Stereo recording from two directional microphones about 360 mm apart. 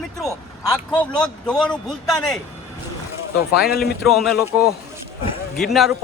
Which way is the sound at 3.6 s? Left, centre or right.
Left.